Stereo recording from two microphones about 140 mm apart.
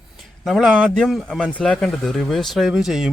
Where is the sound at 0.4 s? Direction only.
Centre (ahead or behind).